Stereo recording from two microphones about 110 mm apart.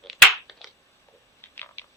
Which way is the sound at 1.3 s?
20° left (ahead or behind).